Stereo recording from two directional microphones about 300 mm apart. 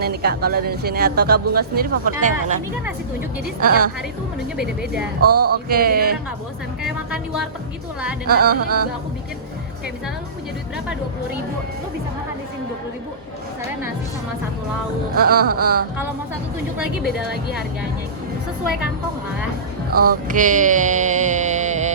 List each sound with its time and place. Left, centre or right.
0.0 s speech: right
2.8 s speech: centre
3.6 s a woman's voice: right
4.5 s speech: centre
5.2 s speech: right
5.5 s speech: right
6.8 s speech: centre
8.3 s speech: right
15.1 s speech: right
20.2 s music: right